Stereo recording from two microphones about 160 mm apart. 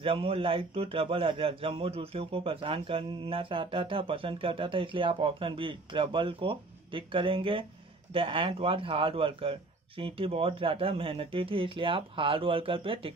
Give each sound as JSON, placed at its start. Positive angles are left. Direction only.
{"t": 0.0, "sound": "a man's voice", "side_deg": -35}